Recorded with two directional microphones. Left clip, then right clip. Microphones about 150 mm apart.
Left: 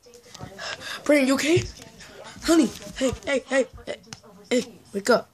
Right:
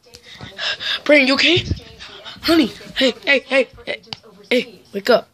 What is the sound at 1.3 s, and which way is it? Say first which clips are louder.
Dog: right 7 dB; 5° right (ahead or behind).